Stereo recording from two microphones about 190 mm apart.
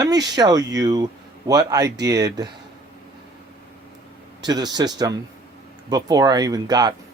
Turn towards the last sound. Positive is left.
turn(degrees=-20)  # may be behind; listen again after turning